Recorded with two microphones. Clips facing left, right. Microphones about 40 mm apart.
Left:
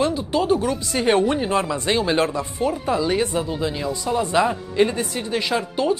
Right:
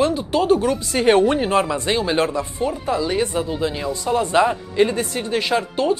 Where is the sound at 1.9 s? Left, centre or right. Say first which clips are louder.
Even; centre.